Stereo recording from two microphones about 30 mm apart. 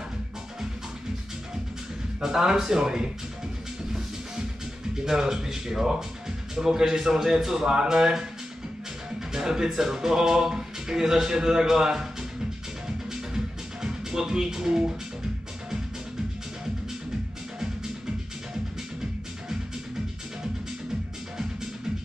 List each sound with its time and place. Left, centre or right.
2.2 s speech: centre
5.0 s speech: centre
9.3 s speech: centre
12.8 s music: centre
13.8 s speech: centre